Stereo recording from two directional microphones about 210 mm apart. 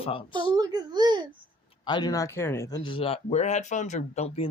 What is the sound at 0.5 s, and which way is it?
Speech, 20° right (ahead or behind).